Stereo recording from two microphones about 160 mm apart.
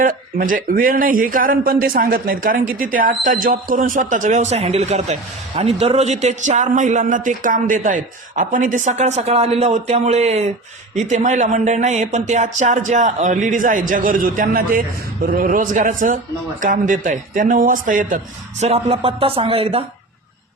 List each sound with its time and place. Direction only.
0.0 s a man's voice: 60° right (ahead or behind)
18.6 s speech: 40° right (ahead or behind)